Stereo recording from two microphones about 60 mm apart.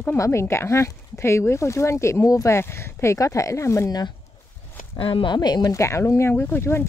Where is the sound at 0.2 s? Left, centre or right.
Left.